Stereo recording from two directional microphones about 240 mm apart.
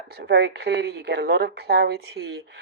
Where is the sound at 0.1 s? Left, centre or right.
Right.